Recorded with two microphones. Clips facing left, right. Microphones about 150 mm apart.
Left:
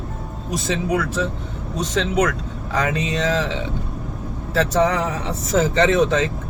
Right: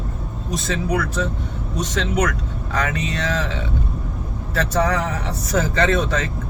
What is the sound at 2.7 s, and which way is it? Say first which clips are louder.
Speech: left 2 dB; 20° left (ahead or behind).